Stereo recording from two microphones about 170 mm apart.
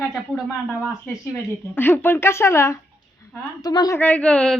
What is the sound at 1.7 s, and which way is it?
A man's voice, 10° left (ahead or behind).